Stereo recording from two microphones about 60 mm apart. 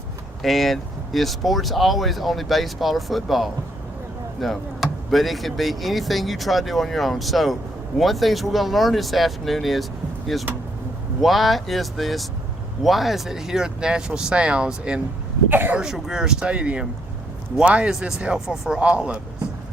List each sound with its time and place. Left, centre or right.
0.4 s speech: centre
15.4 s speech: right
15.8 s speech: centre
18.4 s speech: centre
18.8 s speech: centre